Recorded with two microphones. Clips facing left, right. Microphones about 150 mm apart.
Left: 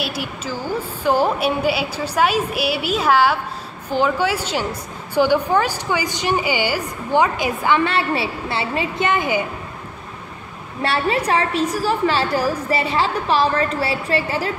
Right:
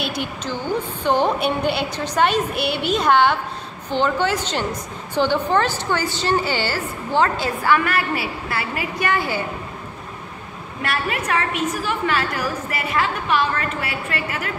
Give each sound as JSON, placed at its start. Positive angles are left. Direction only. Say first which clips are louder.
{"t": 0.0, "sound": "a woman's voice", "louder": "even", "side_deg": 5}
{"t": 10.8, "sound": "a woman's voice", "louder": "left 5 dB", "side_deg": 30}